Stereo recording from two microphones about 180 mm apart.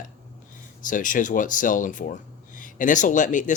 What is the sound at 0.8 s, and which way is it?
Speech, 45° left (ahead or behind).